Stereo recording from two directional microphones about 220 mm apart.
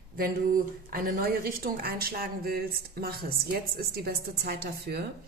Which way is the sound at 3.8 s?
45° right (ahead or behind).